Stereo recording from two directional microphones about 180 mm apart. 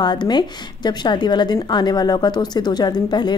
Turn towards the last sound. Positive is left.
turn(degrees=25)  # may be behind; listen again after turning